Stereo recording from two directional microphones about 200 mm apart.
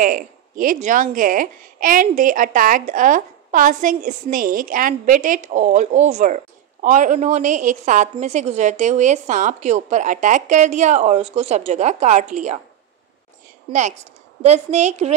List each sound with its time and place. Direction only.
0.0 s speech: 45° right (ahead or behind)
13.7 s speech: 35° right (ahead or behind)